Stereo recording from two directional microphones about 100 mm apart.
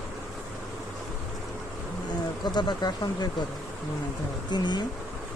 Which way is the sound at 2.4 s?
45° left (ahead or behind).